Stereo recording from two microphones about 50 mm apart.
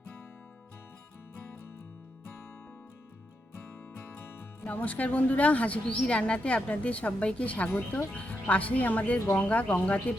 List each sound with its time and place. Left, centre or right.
3.6 s music: left
4.7 s a woman's voice: left
7.7 s speech: left
8.1 s a woman's voice: left